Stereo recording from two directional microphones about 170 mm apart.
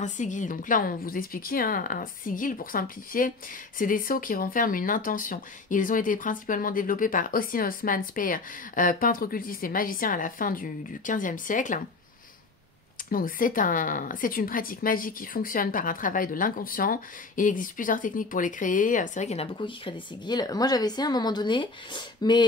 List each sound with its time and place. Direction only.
0.0 s a woman's voice: 45° left (ahead or behind)
13.1 s speech: 55° left (ahead or behind); by 22.4 s 25° left (ahead or behind)